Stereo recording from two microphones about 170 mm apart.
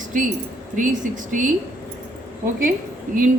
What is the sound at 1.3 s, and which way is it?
Speech, 50° right (ahead or behind).